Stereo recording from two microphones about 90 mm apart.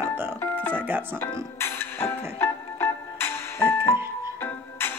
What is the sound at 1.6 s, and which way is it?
Music, 25° left (ahead or behind).